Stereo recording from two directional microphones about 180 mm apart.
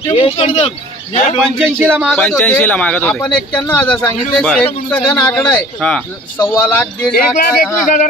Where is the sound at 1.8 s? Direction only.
10° right (ahead or behind).